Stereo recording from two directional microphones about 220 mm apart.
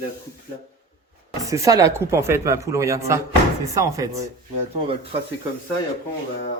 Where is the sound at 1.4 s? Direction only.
15° right (ahead or behind).